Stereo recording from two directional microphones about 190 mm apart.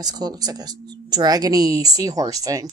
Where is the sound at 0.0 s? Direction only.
20° right (ahead or behind).